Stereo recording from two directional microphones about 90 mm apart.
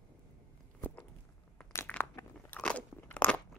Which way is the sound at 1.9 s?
15° left (ahead or behind).